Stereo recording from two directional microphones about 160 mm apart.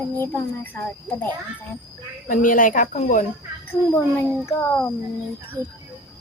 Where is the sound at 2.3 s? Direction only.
55° left (ahead or behind).